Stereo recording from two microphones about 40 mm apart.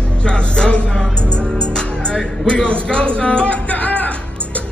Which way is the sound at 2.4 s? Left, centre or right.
Left.